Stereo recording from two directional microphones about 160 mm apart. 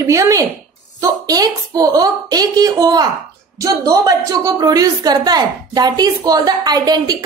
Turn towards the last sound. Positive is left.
turn(degrees=-25)  # may be behind; listen again after turning